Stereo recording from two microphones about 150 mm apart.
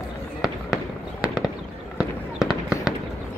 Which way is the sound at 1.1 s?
5° right (ahead or behind).